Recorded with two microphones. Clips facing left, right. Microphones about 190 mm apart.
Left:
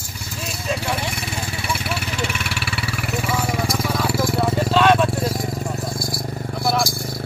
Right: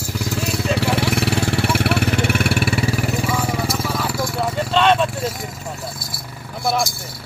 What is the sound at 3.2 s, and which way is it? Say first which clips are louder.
Vehicle: right 2 dB; 10° left (ahead or behind).